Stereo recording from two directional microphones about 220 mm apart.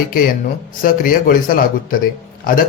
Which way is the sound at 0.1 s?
40° left (ahead or behind).